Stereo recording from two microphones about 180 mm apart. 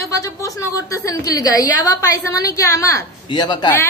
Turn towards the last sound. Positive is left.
turn(degrees=25)  # may be behind; listen again after turning